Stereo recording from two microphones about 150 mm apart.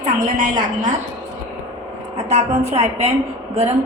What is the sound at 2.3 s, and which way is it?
Speech, 45° right (ahead or behind).